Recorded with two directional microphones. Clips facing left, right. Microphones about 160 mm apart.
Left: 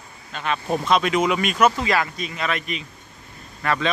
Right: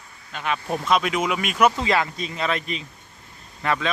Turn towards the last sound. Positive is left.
turn(degrees=-20)  # may be behind; listen again after turning